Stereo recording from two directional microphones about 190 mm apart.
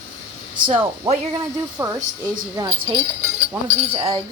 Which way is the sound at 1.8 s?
15° right (ahead or behind).